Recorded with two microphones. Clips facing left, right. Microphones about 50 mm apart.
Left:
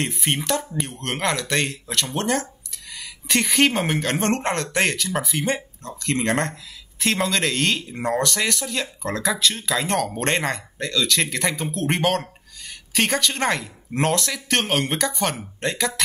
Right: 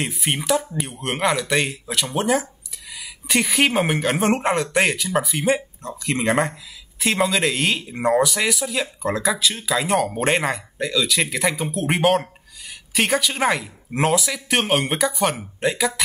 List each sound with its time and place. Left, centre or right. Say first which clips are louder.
0.0 s speech: even; centre